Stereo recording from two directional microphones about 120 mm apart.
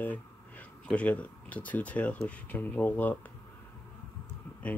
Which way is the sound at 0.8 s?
10° left (ahead or behind).